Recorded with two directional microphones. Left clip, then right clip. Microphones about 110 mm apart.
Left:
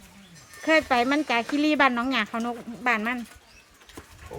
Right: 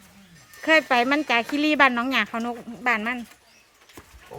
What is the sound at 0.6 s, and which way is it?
Speech, 40° right (ahead or behind).